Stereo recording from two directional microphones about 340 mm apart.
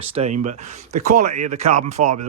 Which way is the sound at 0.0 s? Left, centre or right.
Centre.